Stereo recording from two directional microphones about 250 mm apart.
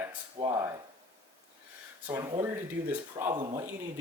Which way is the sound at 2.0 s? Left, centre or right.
Centre.